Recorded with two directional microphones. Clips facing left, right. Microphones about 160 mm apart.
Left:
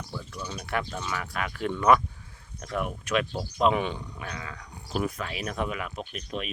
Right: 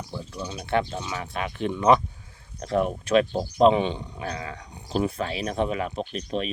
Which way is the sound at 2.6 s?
30° right (ahead or behind).